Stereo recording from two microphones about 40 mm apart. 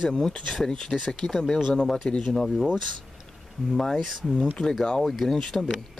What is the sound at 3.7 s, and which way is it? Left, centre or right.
Speech, centre.